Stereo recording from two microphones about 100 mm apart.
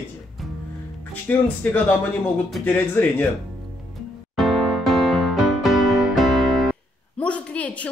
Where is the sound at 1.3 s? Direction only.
20° left (ahead or behind).